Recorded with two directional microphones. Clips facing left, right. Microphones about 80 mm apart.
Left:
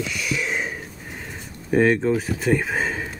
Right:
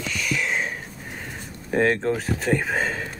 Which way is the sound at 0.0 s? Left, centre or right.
Centre.